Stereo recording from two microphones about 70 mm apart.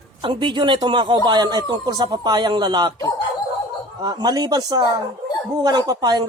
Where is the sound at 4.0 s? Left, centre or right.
Right.